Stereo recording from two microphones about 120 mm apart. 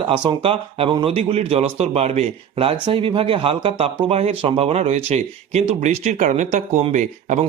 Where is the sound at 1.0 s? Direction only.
55° right (ahead or behind); by 6.8 s 75° right (ahead or behind).